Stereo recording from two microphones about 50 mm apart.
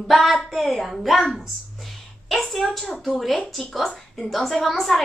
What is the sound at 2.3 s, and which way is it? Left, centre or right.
A woman's voice, centre.